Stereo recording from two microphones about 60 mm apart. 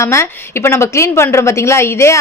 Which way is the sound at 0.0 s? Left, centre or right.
Left.